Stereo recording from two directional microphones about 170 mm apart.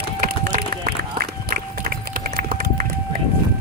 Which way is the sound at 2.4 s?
65° right (ahead or behind).